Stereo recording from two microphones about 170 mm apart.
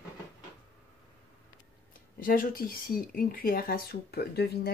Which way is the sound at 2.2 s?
55° left (ahead or behind).